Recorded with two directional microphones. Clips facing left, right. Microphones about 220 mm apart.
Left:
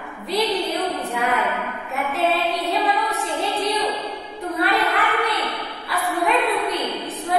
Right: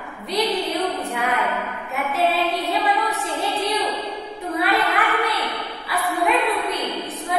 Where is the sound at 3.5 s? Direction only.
Centre (ahead or behind).